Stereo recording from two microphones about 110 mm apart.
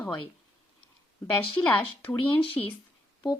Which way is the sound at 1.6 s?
15° left (ahead or behind).